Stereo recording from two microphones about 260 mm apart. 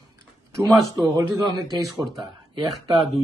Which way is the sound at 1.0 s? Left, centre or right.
Centre.